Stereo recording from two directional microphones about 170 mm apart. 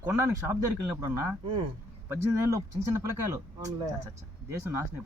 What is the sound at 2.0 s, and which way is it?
Speech, 20° right (ahead or behind).